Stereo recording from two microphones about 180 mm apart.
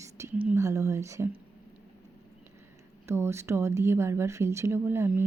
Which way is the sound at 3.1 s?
15° right (ahead or behind).